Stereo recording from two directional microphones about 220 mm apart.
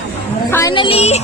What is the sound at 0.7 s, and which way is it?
Music, 25° left (ahead or behind).